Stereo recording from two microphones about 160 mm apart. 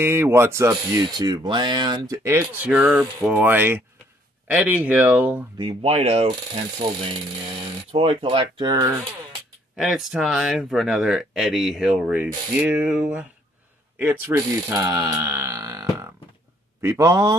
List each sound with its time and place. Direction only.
0.0 s speech: 15° right (ahead or behind)
2.2 s speech: 10° right (ahead or behind)
5.6 s speech: 35° right (ahead or behind); by 9.0 s 20° right (ahead or behind)
9.8 s speech: centre (ahead or behind); by 17.4 s 20° right (ahead or behind)